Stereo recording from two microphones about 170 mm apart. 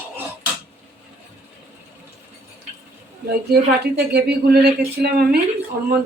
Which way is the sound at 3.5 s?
70° right (ahead or behind).